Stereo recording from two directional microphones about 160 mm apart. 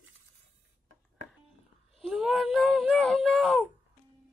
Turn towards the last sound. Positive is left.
turn(degrees=0)  # may be behind; listen again after turning